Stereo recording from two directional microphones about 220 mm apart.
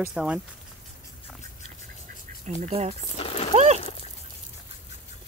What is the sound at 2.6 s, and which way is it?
Speech, 30° right (ahead or behind).